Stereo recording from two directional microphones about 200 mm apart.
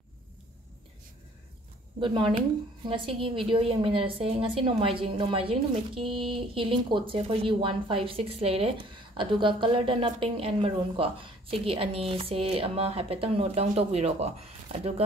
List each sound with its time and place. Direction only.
2.0 s a woman's voice: 25° right (ahead or behind)